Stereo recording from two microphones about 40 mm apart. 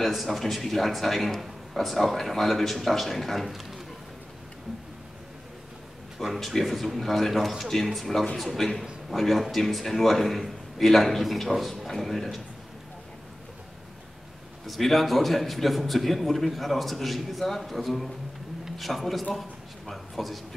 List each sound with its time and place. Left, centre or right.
0.0 s a man's voice: centre
6.1 s a man's voice: centre
14.7 s a man's voice: centre
19.9 s a sound: centre